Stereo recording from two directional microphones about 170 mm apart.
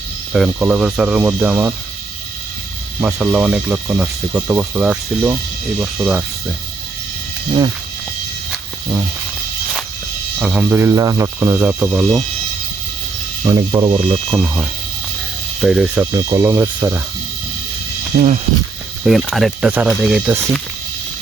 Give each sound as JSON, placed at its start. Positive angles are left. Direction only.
{"t": 0.3, "sound": "speech", "side_deg": -5}
{"t": 3.0, "sound": "speech", "side_deg": -10}
{"t": 10.4, "sound": "speech", "side_deg": -5}
{"t": 13.4, "sound": "speech", "side_deg": -20}
{"t": 16.1, "sound": "speech", "side_deg": -20}
{"t": 18.1, "sound": "speech", "side_deg": -60}
{"t": 19.3, "sound": "speech", "side_deg": 0}